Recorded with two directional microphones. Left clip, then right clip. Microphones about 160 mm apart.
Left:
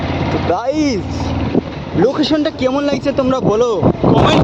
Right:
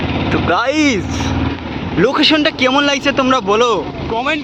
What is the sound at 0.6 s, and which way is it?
Speech, 10° left (ahead or behind).